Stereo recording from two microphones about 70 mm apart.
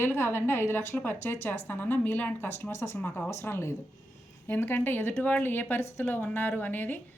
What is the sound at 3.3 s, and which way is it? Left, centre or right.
A woman's voice, left.